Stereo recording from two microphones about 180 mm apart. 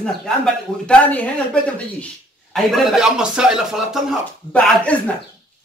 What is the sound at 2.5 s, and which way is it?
Speech, centre (ahead or behind).